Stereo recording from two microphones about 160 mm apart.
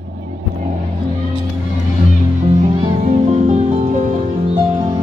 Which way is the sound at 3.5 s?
45° right (ahead or behind).